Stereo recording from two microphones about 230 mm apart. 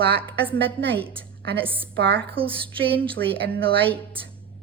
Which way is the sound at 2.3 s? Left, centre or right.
Right.